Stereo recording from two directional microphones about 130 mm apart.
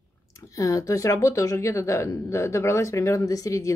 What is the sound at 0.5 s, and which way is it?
Speech, 25° left (ahead or behind).